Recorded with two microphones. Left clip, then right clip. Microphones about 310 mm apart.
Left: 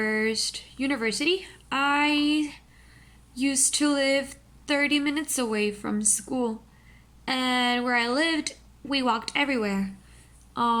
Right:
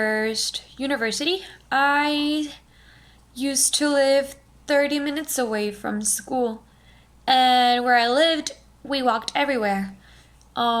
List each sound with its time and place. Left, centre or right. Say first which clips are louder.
0.0 s speech: right 3 dB; centre
2.1 s speech: right 1 dB; right
3.3 s speech: right 3 dB; centre
6.2 s speech: right 9 dB; right
7.3 s speech: right 9 dB; centre